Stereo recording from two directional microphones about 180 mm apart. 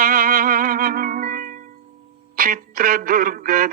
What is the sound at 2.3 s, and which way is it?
Music, 55° right (ahead or behind).